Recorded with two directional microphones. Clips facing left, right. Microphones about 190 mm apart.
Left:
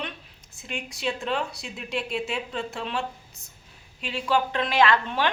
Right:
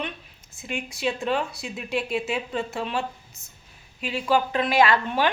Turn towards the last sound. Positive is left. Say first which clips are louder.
# right 1 dB
turn(degrees=-10)  # may be behind; listen again after turning